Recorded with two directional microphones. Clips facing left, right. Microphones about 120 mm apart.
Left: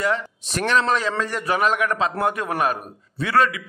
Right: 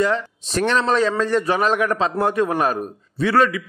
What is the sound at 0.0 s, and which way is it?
A man's voice, 30° right (ahead or behind).